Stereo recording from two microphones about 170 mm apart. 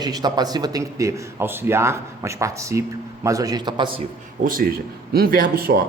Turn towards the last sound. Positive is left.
turn(degrees=-60)  # may be behind; listen again after turning